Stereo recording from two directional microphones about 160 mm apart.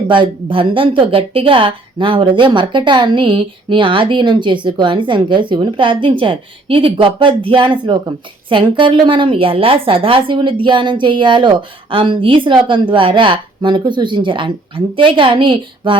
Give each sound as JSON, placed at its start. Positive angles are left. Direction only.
{"t": 0.1, "sound": "a woman's voice", "side_deg": -30}